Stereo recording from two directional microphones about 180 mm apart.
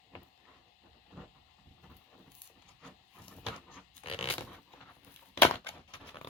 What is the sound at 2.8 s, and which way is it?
Vehicle, 10° left (ahead or behind).